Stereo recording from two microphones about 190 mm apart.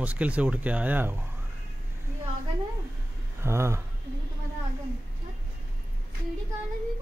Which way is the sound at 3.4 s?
15° right (ahead or behind).